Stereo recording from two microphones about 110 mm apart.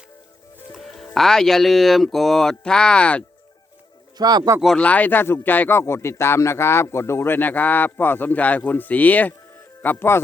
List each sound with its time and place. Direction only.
0.7 s speech: centre (ahead or behind)
4.2 s speech: 40° right (ahead or behind)
4.6 s speech: 10° left (ahead or behind)